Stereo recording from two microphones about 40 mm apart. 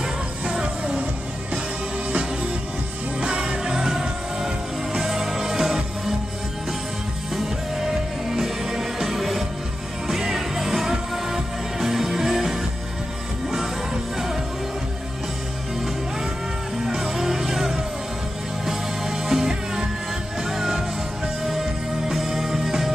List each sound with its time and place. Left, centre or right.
0.0 s music: right
3.2 s music: right; by 5.8 s centre
7.3 s music: centre
14.1 s music: centre
16.8 s music: centre